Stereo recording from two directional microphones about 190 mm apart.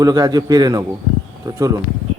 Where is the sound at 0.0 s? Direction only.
20° right (ahead or behind).